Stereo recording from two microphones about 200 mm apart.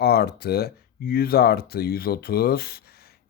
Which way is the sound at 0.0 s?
50° left (ahead or behind).